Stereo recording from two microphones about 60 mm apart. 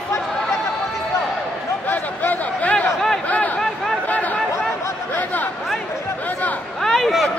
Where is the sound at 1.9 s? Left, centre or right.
Left.